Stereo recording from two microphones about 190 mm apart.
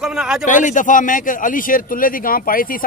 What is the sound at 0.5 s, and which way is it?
A man's voice, 40° left (ahead or behind).